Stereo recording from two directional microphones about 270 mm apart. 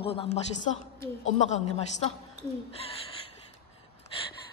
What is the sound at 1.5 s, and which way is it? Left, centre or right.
Speech, left.